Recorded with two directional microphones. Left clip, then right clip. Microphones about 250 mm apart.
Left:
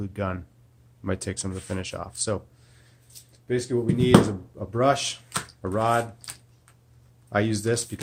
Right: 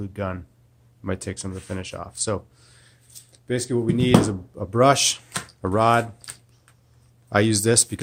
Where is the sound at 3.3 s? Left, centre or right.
Right.